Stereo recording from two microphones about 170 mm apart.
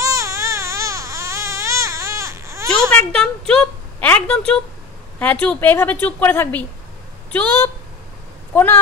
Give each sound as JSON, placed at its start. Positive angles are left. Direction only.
{"t": 0.0, "sound": "baby cry", "side_deg": -20}
{"t": 2.9, "sound": "a woman's voice", "side_deg": 5}